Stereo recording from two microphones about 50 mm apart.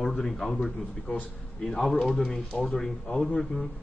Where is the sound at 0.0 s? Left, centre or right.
Centre.